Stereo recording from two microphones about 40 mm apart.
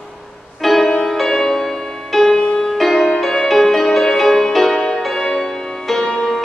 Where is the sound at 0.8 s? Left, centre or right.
Centre.